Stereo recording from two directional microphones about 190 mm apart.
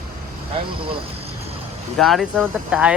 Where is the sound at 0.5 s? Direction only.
30° right (ahead or behind).